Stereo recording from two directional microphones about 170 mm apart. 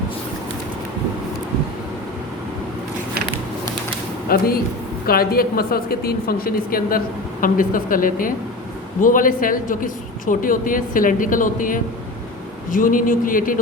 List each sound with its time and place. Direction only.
4.3 s a woman's voice: 60° left (ahead or behind)